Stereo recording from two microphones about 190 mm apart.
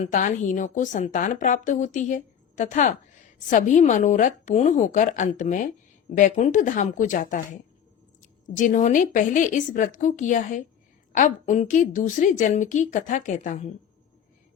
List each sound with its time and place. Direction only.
0.0 s a woman's voice: 40° left (ahead or behind)